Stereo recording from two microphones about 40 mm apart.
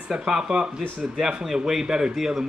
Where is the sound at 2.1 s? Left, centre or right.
Centre.